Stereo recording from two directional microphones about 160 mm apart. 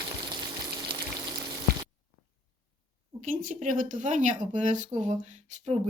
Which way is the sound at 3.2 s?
55° right (ahead or behind).